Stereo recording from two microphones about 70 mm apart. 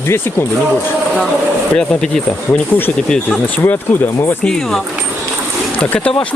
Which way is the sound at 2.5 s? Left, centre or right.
Left.